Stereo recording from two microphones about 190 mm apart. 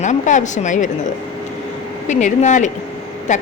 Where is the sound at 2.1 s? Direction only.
40° left (ahead or behind).